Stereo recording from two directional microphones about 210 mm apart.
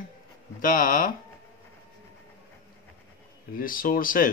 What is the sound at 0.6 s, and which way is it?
Speech, 40° left (ahead or behind).